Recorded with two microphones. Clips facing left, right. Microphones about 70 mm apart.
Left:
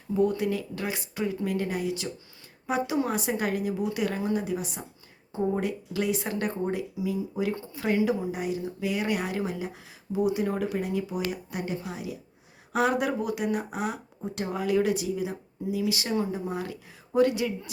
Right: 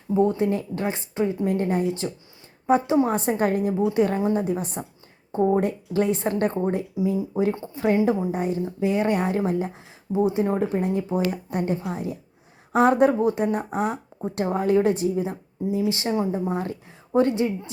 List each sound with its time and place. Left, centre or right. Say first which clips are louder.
0.1 s speech: right 4 dB; right
14.2 s speech: right 7 dB; right